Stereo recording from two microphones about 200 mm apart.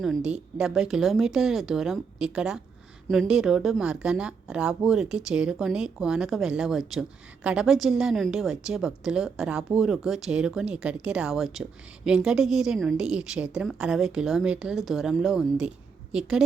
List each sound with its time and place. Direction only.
0.0 s a woman's voice: centre (ahead or behind)